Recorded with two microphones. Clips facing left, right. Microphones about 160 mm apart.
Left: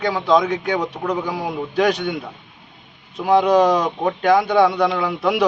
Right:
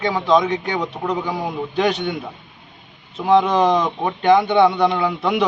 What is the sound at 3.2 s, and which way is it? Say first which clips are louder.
A man's voice: left 1 dB; centre (ahead or behind).